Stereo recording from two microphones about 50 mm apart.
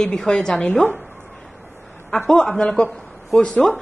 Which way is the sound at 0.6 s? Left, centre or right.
Left.